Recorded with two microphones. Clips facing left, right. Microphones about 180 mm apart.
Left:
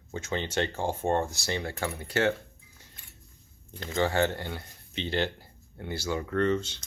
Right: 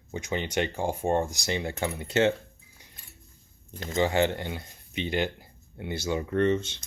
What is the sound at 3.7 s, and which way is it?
Speech, 45° right (ahead or behind).